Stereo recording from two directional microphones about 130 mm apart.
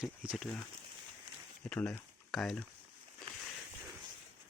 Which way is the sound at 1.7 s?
10° left (ahead or behind).